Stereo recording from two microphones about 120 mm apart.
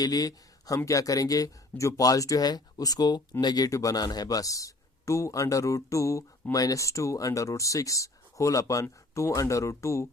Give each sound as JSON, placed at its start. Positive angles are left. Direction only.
{"t": 0.0, "sound": "a man's voice", "side_deg": 30}